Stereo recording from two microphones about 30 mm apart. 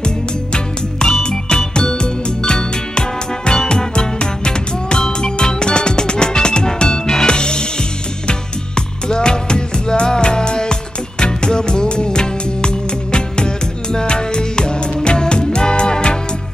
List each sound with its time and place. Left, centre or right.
0.0 s music: left